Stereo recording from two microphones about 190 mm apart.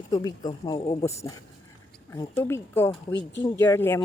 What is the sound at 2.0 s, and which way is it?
A woman's voice, 15° left (ahead or behind).